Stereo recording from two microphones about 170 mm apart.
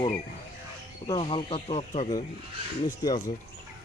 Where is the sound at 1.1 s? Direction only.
30° left (ahead or behind).